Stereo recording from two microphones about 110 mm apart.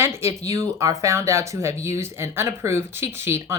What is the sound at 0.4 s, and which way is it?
Speech, 30° right (ahead or behind).